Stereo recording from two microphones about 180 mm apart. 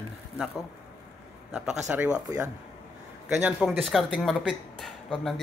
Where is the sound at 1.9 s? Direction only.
5° right (ahead or behind).